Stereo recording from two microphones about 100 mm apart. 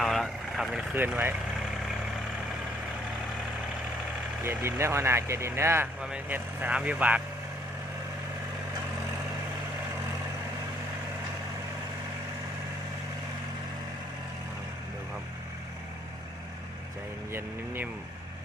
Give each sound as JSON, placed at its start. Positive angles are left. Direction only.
{"t": 0.0, "sound": "vehicle", "side_deg": 0}
{"t": 0.9, "sound": "speech", "side_deg": -20}
{"t": 4.4, "sound": "speech", "side_deg": -25}
{"t": 6.0, "sound": "speech", "side_deg": -10}